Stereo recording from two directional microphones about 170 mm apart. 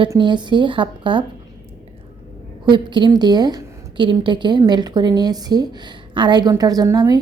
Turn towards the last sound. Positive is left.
turn(degrees=-20)  # may be behind; listen again after turning